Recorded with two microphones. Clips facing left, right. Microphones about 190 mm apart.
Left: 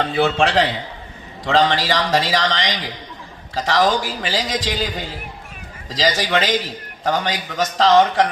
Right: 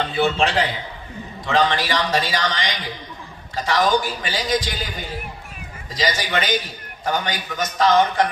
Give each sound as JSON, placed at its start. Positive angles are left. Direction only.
{"t": 0.5, "sound": "a man's voice", "side_deg": 80}